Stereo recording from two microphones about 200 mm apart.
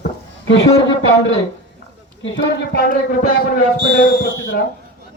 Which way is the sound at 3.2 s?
40° left (ahead or behind).